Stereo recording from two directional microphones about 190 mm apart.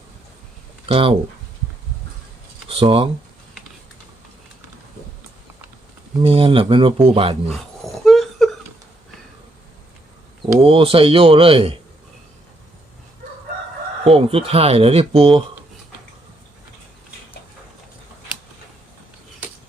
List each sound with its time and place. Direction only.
0.9 s speech: 30° right (ahead or behind)
2.6 s speech: 30° right (ahead or behind)
6.2 s speech: 30° right (ahead or behind)
7.4 s a sound: centre (ahead or behind)
10.6 s speech: 30° right (ahead or behind)
14.0 s speech: 30° right (ahead or behind)